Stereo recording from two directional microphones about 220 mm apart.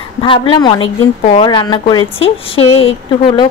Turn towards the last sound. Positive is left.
turn(degrees=25)  # may be behind; listen again after turning